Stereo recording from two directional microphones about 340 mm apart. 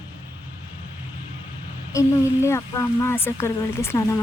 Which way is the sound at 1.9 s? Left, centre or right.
Centre.